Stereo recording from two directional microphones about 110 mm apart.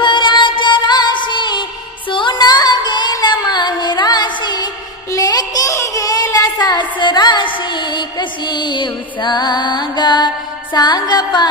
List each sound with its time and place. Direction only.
0.0 s music: 45° left (ahead or behind)
5.1 s child singing: 35° left (ahead or behind)